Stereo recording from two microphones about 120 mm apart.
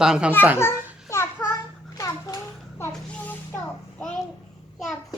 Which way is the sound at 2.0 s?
30° left (ahead or behind).